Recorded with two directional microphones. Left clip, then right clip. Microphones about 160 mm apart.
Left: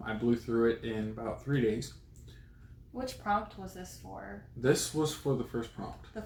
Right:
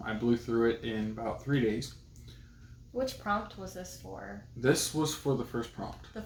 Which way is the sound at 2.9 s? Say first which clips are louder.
Right 1 dB; 15° right (ahead or behind).